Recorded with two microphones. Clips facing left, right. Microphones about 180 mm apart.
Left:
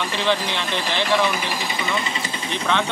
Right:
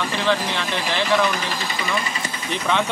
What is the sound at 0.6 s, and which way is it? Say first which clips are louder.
Speech: even; centre (ahead or behind).